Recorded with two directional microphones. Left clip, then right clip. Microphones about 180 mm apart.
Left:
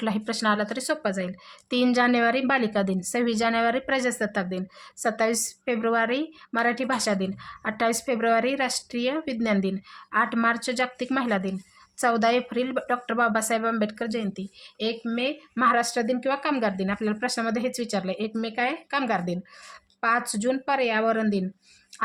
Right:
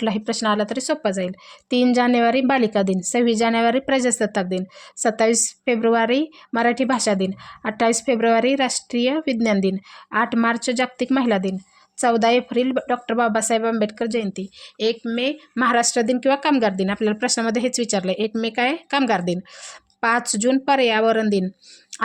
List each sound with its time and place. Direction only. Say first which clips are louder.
0.0 s a woman's voice: right 4 dB; 30° right (ahead or behind)